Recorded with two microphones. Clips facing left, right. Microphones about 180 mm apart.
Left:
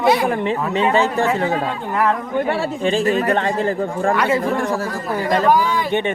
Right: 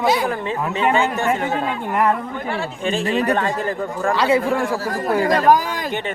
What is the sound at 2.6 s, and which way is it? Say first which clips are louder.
Speech: left 4 dB; 35° left (ahead or behind).